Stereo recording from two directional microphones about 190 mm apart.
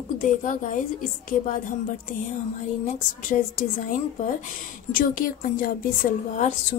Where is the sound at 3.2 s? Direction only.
45° left (ahead or behind).